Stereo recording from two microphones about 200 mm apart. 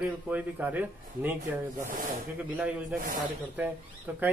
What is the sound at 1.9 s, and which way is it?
Speech, 45° right (ahead or behind).